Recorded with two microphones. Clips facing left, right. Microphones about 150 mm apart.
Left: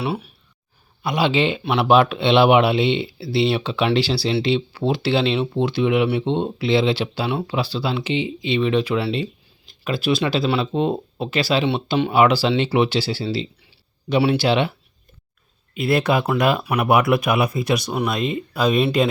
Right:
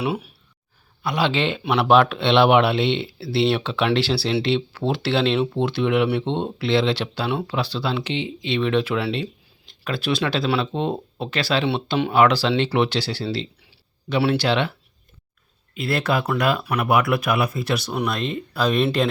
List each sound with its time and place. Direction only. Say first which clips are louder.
0.0 s speech: even; 10° right (ahead or behind)
1.0 s speech: left 2 dB; 10° left (ahead or behind)
15.7 s speech: left 4 dB; 20° left (ahead or behind)